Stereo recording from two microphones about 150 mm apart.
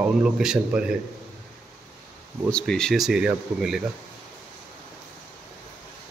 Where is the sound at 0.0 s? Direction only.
5° right (ahead or behind).